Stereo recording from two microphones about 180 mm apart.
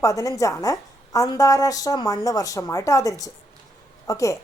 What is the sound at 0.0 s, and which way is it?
Speech, 20° left (ahead or behind).